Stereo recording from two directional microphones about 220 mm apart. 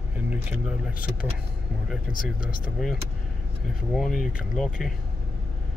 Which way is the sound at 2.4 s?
40° left (ahead or behind).